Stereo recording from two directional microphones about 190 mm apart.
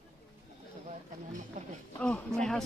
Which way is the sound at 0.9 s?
40° right (ahead or behind).